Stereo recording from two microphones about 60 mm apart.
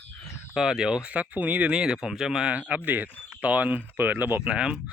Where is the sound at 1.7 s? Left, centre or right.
Centre.